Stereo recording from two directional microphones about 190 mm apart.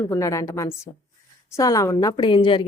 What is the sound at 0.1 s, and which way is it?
A woman's voice, 15° left (ahead or behind).